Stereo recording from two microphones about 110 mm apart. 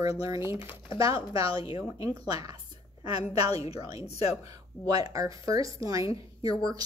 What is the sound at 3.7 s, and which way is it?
Speech, 40° right (ahead or behind).